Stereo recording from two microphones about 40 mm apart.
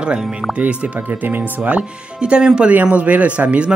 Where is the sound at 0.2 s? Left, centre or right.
Centre.